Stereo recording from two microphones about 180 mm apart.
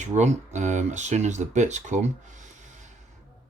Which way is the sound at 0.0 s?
40° right (ahead or behind).